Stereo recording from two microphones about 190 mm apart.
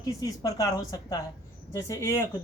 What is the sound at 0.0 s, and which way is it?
A woman's voice, 20° left (ahead or behind).